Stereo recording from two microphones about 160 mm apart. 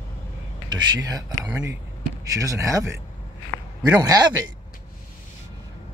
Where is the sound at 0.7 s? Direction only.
25° right (ahead or behind).